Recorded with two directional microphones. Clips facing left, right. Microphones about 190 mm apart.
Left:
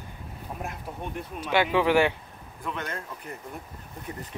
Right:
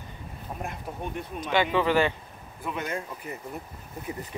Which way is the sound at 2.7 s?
10° right (ahead or behind).